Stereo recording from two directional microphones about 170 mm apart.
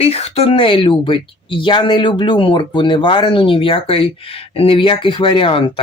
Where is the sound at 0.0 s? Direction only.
35° left (ahead or behind).